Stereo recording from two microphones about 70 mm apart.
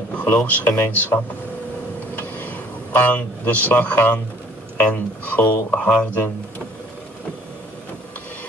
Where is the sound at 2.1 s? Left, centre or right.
Left.